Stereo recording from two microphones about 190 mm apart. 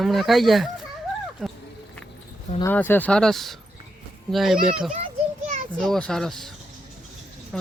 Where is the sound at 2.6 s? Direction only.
10° left (ahead or behind).